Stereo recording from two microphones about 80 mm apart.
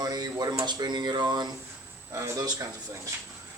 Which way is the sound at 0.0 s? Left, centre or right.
Right.